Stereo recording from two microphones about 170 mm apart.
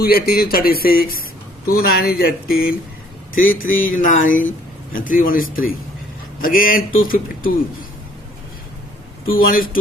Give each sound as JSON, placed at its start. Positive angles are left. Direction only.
{"t": 0.0, "sound": "speech", "side_deg": 65}
{"t": 9.3, "sound": "speech", "side_deg": 55}